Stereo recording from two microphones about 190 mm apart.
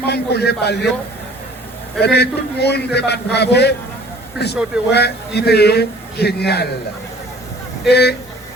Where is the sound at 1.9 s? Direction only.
60° left (ahead or behind).